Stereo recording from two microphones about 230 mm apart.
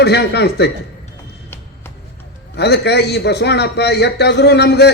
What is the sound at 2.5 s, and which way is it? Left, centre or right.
A man's voice, left.